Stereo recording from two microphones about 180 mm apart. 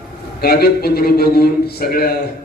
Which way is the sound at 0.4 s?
60° left (ahead or behind).